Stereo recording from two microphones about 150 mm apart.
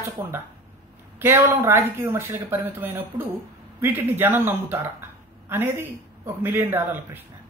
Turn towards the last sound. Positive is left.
turn(degrees=-15)  # may be behind; listen again after turning